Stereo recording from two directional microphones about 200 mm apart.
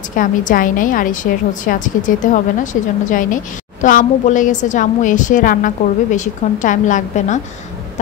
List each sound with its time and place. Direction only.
0.1 s a woman's voice: 40° left (ahead or behind)